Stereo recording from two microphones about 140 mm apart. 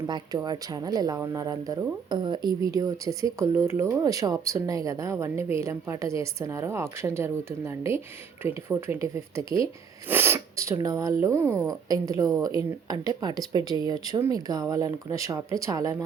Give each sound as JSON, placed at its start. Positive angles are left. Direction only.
{"t": 0.1, "sound": "speech", "side_deg": -30}